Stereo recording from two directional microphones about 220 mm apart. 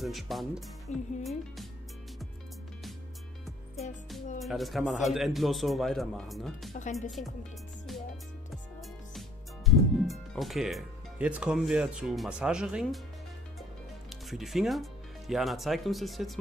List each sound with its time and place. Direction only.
0.0 s a man's voice: centre (ahead or behind)
0.9 s speech: 35° left (ahead or behind)
4.4 s a man's voice: centre (ahead or behind)
6.7 s speech: 35° left (ahead or behind)
7.1 s a man's voice: centre (ahead or behind)
9.7 s speech: centre (ahead or behind)
14.3 s a man's voice: centre (ahead or behind)